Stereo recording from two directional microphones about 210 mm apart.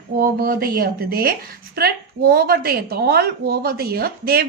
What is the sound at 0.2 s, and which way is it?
A woman's voice, 45° right (ahead or behind).